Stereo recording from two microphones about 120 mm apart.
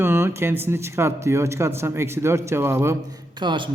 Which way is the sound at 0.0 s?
20° right (ahead or behind).